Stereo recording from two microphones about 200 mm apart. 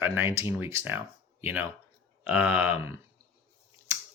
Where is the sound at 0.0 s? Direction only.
10° right (ahead or behind).